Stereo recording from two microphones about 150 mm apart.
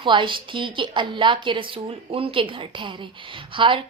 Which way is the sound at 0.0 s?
35° right (ahead or behind).